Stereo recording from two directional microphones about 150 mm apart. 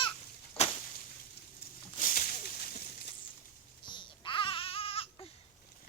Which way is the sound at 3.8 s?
30° left (ahead or behind).